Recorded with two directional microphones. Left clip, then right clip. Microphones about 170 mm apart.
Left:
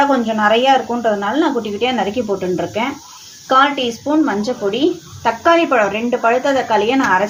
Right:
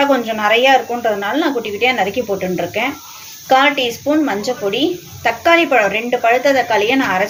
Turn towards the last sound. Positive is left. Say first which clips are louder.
# left 1 dB
turn(degrees=40)  # may be behind; listen again after turning